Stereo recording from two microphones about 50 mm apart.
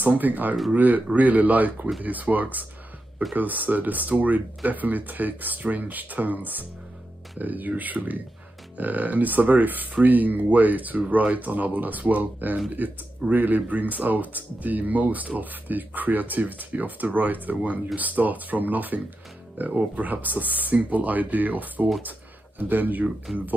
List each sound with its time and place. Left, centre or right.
0.0 s speech: right
23.3 s speech: centre